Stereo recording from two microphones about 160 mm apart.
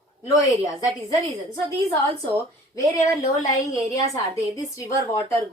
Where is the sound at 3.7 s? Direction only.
20° left (ahead or behind).